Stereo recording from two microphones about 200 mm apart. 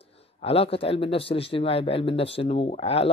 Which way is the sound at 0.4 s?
30° left (ahead or behind).